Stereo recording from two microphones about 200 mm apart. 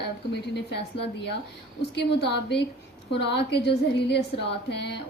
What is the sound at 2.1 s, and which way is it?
Speech, 60° left (ahead or behind).